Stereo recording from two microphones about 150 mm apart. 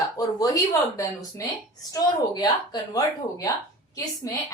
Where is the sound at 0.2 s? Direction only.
25° left (ahead or behind).